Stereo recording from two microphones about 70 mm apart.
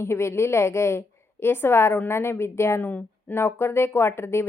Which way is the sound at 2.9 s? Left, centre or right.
Left.